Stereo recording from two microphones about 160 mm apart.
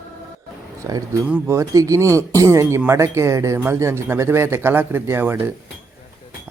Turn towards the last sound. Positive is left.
turn(degrees=-15)  # may be behind; listen again after turning